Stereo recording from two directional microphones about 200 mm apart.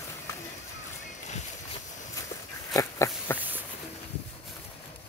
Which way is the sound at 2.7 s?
15° left (ahead or behind).